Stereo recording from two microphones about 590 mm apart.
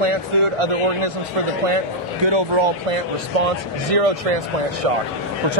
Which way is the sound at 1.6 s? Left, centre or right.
Right.